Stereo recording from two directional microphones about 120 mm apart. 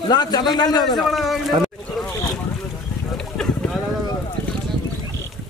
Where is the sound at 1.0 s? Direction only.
Centre (ahead or behind).